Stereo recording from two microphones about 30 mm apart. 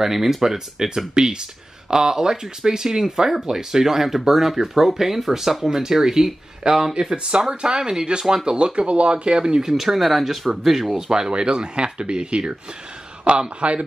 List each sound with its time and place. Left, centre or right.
0.0 s speech: centre
6.6 s speech: right
8.8 s speech: right
9.1 s speech: right
9.7 s speech: centre
11.0 s speech: right